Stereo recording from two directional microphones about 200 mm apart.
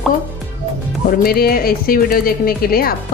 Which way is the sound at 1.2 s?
50° left (ahead or behind).